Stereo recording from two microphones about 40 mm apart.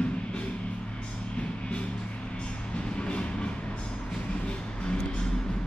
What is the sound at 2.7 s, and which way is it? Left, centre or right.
Music, left.